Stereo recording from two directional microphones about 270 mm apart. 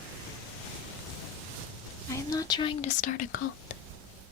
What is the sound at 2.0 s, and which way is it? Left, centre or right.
Speech, centre.